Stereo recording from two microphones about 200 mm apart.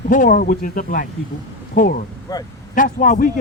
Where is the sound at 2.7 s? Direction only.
40° left (ahead or behind).